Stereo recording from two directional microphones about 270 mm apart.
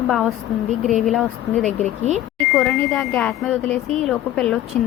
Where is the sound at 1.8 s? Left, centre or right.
Right.